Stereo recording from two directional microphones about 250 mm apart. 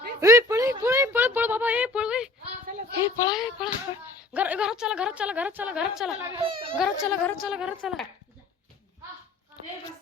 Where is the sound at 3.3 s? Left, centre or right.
Centre.